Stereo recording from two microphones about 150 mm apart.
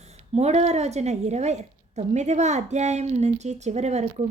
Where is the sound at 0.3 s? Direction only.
45° right (ahead or behind).